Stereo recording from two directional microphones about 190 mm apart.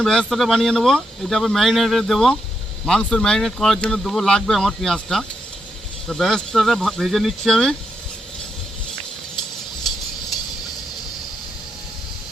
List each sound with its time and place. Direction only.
0.0 s speech: 5° left (ahead or behind)